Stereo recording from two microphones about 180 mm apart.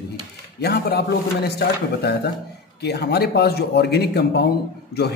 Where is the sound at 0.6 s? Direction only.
60° left (ahead or behind).